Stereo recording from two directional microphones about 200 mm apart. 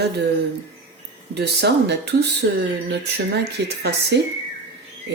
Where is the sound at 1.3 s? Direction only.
55° right (ahead or behind).